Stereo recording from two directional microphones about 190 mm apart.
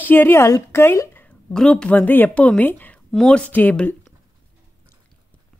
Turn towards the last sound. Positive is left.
turn(degrees=10)  # may be behind; listen again after turning